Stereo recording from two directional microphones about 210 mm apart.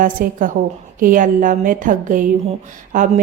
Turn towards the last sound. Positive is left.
turn(degrees=-40)  # may be behind; listen again after turning